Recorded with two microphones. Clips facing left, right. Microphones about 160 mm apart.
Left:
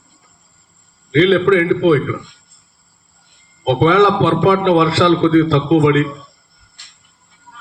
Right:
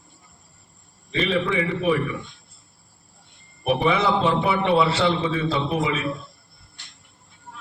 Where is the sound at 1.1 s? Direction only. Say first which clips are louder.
Left 12 dB; 85° left.